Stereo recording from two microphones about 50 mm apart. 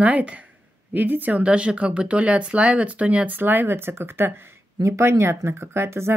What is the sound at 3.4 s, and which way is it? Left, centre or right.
Speech, right.